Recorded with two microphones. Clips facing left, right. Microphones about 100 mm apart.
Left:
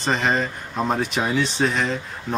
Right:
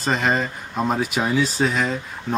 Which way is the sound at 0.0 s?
Centre (ahead or behind).